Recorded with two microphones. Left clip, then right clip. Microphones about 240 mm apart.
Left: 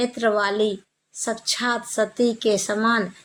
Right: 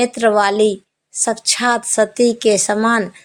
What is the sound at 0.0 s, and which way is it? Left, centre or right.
A woman's voice, right.